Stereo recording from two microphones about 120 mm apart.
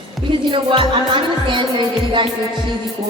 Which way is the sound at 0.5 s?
45° right (ahead or behind).